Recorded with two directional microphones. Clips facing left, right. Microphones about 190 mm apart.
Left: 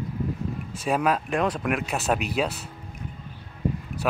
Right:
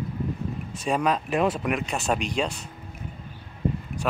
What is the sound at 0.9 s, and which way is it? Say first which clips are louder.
Speech: even; 5° left (ahead or behind).